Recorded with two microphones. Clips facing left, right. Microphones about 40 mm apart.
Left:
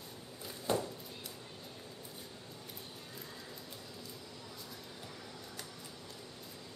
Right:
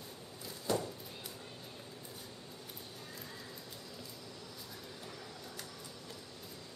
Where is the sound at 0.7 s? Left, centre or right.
Left.